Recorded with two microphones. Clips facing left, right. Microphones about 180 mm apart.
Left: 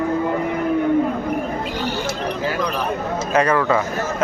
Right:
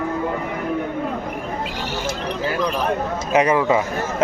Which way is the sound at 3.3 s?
20° right (ahead or behind).